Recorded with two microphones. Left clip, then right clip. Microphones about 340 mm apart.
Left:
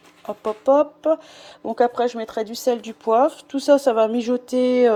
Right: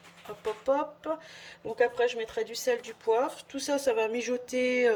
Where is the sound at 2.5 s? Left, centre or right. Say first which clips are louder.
Left 7 dB; centre.